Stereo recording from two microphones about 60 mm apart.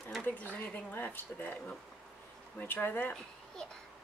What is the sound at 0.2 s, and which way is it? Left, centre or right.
Speech, left.